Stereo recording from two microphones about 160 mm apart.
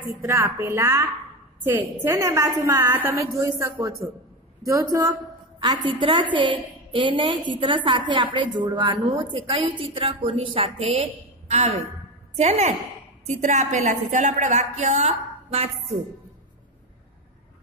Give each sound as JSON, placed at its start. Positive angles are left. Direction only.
{"t": 0.2, "sound": "a woman's voice", "side_deg": -15}